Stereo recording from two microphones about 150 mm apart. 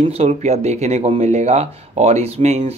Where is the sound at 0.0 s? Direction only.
45° right (ahead or behind).